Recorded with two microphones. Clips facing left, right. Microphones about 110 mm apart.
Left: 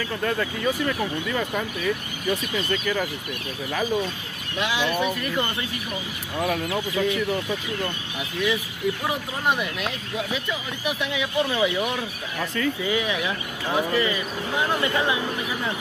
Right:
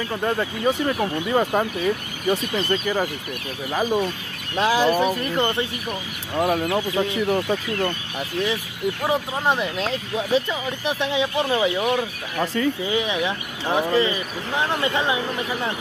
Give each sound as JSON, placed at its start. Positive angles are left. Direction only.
{"t": 0.1, "sound": "speech", "side_deg": -30}
{"t": 1.2, "sound": "speech", "side_deg": -40}
{"t": 3.7, "sound": "speech", "side_deg": -20}
{"t": 4.6, "sound": "speech", "side_deg": -40}
{"t": 9.5, "sound": "speech", "side_deg": -30}